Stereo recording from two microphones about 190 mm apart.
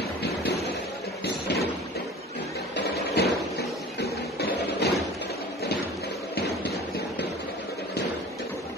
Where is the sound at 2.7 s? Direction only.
60° left (ahead or behind).